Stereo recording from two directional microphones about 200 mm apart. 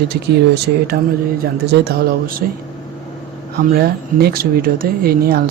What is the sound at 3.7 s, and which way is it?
Speech, 50° right (ahead or behind).